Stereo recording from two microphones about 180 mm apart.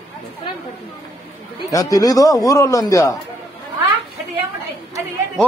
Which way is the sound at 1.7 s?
20° left (ahead or behind).